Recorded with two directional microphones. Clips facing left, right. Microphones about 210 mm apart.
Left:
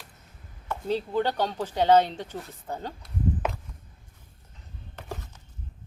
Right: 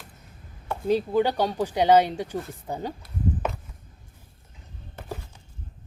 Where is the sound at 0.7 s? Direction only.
10° right (ahead or behind).